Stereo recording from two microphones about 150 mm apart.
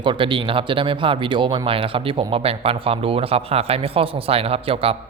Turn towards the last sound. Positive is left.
turn(degrees=-40)  # may be behind; listen again after turning